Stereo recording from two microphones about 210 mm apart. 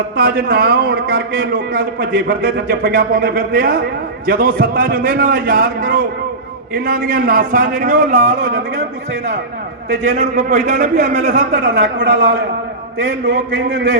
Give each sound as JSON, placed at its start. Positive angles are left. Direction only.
{"t": 0.2, "sound": "a man's voice", "side_deg": -45}
{"t": 8.5, "sound": "a man's voice", "side_deg": -55}
{"t": 10.0, "sound": "a man's voice", "side_deg": -35}
{"t": 13.2, "sound": "a man's voice", "side_deg": -60}